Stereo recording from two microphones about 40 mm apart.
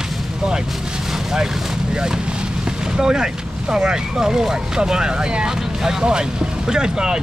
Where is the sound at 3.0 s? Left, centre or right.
Centre.